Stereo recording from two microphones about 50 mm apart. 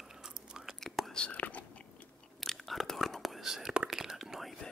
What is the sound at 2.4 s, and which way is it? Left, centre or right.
Whispering, centre.